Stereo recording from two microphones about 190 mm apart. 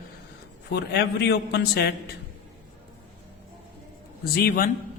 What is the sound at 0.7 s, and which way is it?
A man's voice, 60° left (ahead or behind).